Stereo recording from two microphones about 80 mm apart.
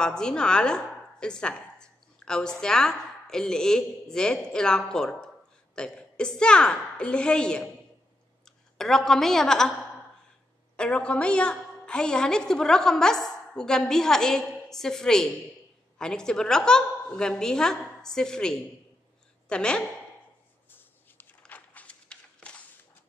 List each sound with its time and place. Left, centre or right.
0.0 s a woman's voice: centre
10.8 s a woman's voice: centre
20.7 s a sound: left